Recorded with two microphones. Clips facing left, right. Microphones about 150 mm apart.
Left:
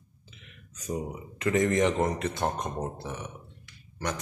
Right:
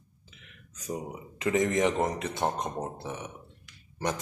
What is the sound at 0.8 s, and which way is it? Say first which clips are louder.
Speech: left 2 dB; 10° right (ahead or behind).